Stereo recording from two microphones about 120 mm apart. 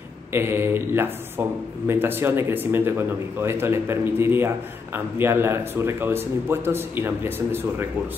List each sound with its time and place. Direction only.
0.3 s speech: 20° right (ahead or behind)